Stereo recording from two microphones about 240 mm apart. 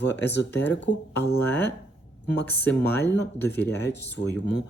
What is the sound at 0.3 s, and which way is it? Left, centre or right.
Speech, left.